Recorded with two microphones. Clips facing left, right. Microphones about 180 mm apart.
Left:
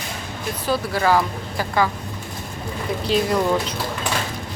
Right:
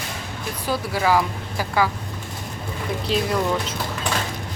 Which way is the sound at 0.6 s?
10° right (ahead or behind).